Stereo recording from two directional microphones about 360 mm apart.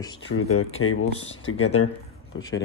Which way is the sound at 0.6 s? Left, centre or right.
Left.